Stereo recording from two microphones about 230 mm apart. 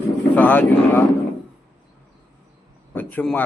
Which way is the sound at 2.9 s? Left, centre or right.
Centre.